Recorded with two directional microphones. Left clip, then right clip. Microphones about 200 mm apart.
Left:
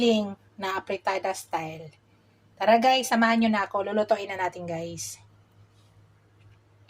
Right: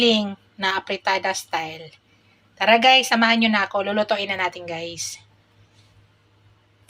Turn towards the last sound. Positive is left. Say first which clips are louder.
# right 4 dB
turn(degrees=10)  # may be behind; listen again after turning